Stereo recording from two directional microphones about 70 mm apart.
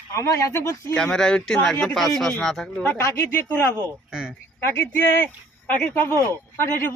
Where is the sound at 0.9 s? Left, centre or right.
Centre.